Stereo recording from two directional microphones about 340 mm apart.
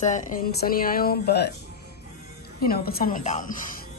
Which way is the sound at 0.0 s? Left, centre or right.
Left.